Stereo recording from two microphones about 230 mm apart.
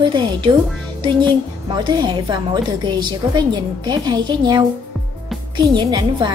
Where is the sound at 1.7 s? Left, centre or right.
Centre.